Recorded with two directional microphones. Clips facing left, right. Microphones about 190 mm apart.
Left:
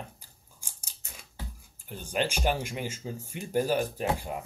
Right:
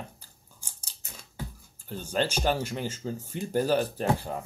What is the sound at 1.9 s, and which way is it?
Speech, 15° left (ahead or behind).